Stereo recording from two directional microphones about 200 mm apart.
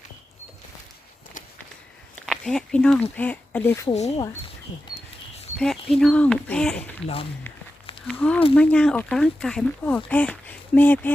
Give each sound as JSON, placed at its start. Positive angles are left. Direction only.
{"t": 2.2, "sound": "speech", "side_deg": 0}
{"t": 3.8, "sound": "speech", "side_deg": 35}
{"t": 5.5, "sound": "speech", "side_deg": 0}
{"t": 8.0, "sound": "speech", "side_deg": 5}